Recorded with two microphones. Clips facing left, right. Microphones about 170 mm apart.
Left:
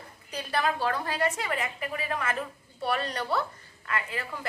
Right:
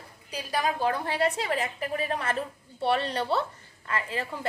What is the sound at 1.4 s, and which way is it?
A woman's voice, 35° right (ahead or behind).